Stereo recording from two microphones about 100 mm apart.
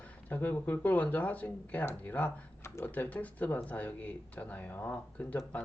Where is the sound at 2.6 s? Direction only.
25° left (ahead or behind).